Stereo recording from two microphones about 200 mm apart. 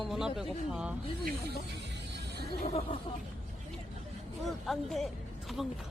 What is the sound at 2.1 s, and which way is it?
Music, 55° right (ahead or behind).